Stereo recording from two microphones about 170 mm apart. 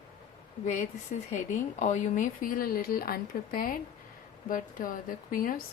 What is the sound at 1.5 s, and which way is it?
Speech, 45° left (ahead or behind).